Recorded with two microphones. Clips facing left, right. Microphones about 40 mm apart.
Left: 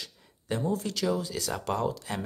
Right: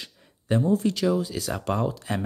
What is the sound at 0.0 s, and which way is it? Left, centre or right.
Speech, centre.